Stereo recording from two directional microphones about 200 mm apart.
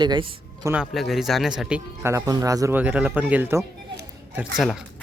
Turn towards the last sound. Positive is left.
turn(degrees=0)  # may be behind; listen again after turning